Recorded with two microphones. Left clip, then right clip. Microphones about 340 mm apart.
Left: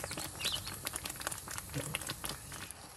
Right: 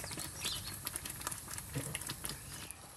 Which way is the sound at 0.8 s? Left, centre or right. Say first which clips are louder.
Left 3 dB; centre.